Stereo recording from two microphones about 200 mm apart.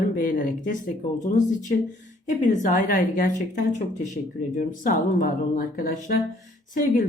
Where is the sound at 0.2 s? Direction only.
45° left (ahead or behind).